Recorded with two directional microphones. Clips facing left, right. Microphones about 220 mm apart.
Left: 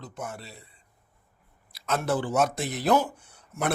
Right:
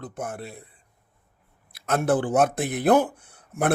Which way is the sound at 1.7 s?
55° right (ahead or behind).